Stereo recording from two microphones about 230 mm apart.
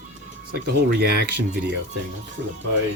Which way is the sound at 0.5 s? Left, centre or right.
Right.